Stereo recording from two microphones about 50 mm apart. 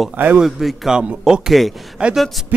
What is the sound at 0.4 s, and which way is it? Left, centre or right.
A man's voice, centre.